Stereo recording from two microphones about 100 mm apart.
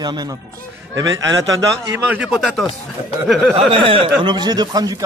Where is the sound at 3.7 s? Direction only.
60° right (ahead or behind); by 5.0 s 40° right (ahead or behind).